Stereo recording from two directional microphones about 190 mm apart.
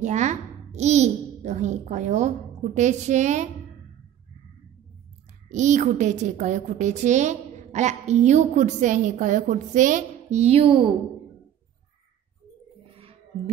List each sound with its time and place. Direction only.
0.0 s a woman's voice: 40° right (ahead or behind)
5.5 s a woman's voice: 40° right (ahead or behind)